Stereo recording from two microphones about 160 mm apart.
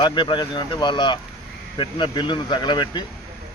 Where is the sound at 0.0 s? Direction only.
30° left (ahead or behind).